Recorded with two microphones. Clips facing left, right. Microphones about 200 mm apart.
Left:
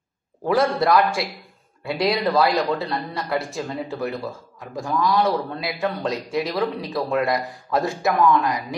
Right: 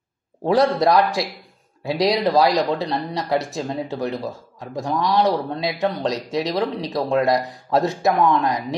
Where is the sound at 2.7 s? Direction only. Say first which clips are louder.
Right 2 dB; 30° right (ahead or behind).